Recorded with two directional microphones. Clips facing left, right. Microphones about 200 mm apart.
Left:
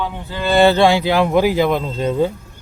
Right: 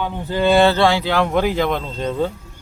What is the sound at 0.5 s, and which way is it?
Speech, 15° left (ahead or behind).